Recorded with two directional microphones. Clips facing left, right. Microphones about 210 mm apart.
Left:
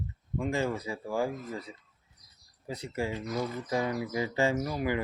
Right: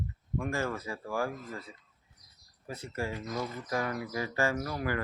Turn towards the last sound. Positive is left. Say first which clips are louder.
# left 3 dB
turn(degrees=20)  # may be behind; listen again after turning